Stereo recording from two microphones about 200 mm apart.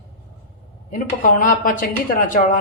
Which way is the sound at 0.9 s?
40° left (ahead or behind).